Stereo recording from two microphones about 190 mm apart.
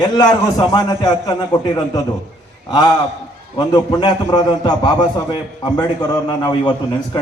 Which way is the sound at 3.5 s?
25° left (ahead or behind).